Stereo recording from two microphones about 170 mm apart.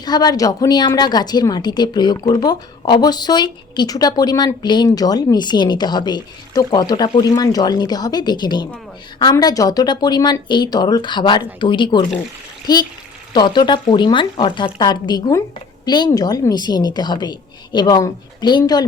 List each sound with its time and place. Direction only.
0.0 s a woman's voice: 25° left (ahead or behind)
13.3 s a woman's voice: 25° left (ahead or behind)